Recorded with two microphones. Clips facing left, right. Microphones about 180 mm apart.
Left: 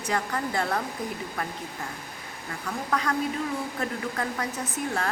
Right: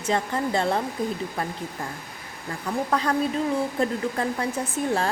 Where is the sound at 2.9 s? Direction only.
30° right (ahead or behind).